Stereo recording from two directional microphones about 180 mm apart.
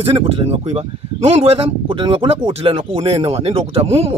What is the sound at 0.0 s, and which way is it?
Speech, 30° right (ahead or behind).